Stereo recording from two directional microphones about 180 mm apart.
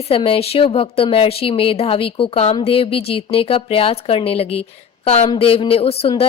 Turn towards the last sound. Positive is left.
turn(degrees=30)  # may be behind; listen again after turning